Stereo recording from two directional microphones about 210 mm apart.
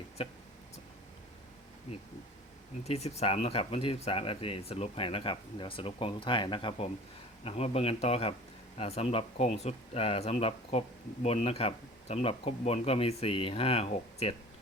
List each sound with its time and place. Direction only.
0.2 s speech: 25° left (ahead or behind)
2.8 s speech: 30° left (ahead or behind)